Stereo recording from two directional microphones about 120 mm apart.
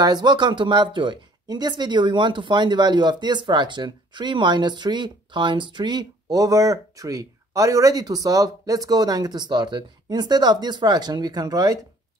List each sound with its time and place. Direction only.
0.0 s speech: 35° right (ahead or behind)